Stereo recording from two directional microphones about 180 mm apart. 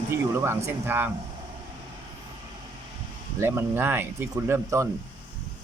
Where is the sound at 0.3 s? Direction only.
15° right (ahead or behind).